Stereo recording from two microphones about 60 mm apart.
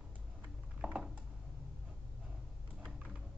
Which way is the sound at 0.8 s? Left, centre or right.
Centre.